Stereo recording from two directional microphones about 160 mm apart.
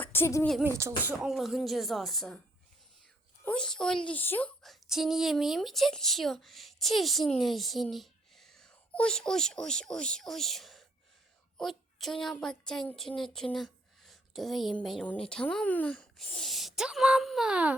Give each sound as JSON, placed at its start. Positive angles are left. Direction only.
{"t": 0.0, "sound": "a sound", "side_deg": 15}
{"t": 0.8, "sound": "speech", "side_deg": -15}
{"t": 1.2, "sound": "speech", "side_deg": 0}
{"t": 3.4, "sound": "a woman's voice", "side_deg": 5}